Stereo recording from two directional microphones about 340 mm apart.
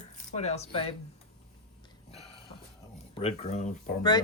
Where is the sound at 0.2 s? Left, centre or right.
Centre.